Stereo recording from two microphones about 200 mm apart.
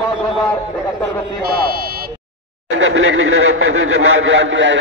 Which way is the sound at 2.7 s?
70° right (ahead or behind).